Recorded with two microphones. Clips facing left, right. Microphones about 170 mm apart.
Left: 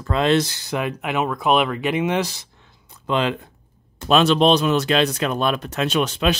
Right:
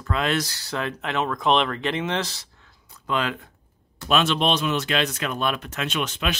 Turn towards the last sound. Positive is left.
turn(degrees=35)  # may be behind; listen again after turning